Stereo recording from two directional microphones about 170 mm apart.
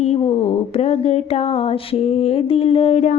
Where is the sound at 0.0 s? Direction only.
35° left (ahead or behind).